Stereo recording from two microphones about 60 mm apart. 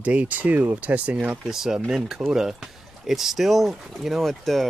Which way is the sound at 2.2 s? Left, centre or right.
Right.